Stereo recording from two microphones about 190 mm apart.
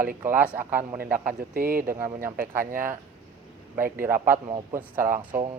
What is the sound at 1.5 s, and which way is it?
Speech, 50° right (ahead or behind).